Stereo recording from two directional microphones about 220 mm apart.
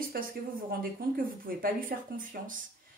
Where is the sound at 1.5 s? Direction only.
40° right (ahead or behind).